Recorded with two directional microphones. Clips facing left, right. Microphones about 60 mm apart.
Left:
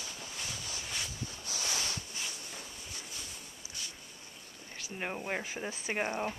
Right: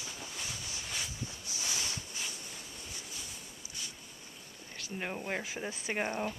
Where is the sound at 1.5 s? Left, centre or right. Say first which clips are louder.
Left 3 dB; left.